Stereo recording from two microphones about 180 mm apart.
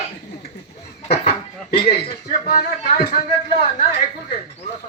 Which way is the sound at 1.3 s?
60° left (ahead or behind).